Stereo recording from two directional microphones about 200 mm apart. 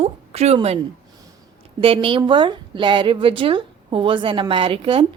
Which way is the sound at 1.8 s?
25° right (ahead or behind).